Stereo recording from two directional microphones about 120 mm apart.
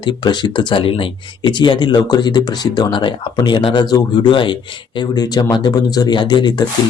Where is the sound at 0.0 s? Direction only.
40° left (ahead or behind).